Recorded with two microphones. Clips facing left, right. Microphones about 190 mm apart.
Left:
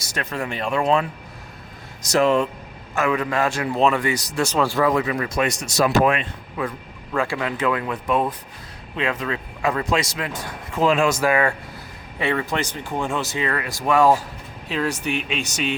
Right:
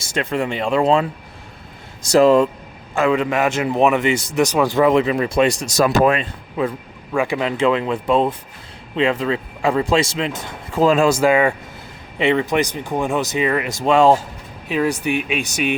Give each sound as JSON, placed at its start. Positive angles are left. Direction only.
{"t": 0.0, "sound": "speech", "side_deg": -25}
{"t": 2.0, "sound": "speech", "side_deg": -35}
{"t": 4.4, "sound": "speech", "side_deg": -15}
{"t": 5.7, "sound": "speech", "side_deg": -45}
{"t": 6.6, "sound": "speech", "side_deg": -20}
{"t": 14.7, "sound": "speech", "side_deg": -15}